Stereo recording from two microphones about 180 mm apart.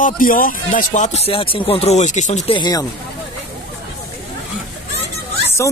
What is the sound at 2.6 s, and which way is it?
Speech, 20° left (ahead or behind).